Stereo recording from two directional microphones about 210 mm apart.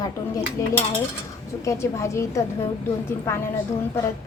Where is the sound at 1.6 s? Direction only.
15° left (ahead or behind).